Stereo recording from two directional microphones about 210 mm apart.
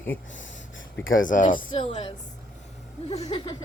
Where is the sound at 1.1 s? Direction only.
40° left (ahead or behind).